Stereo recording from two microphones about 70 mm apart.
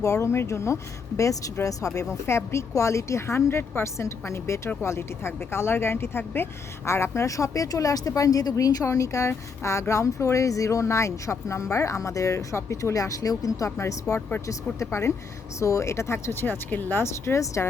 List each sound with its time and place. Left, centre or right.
0.0 s a woman's voice: left
13.7 s a woman's voice: left